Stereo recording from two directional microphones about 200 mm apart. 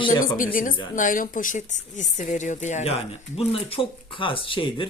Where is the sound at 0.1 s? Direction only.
45° left (ahead or behind).